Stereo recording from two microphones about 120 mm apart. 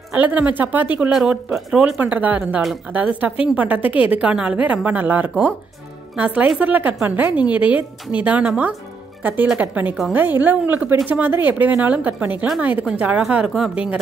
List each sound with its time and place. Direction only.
0.1 s a woman's voice: 10° right (ahead or behind)